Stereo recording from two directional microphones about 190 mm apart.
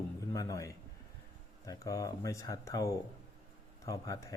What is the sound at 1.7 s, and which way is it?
Speech, 15° left (ahead or behind).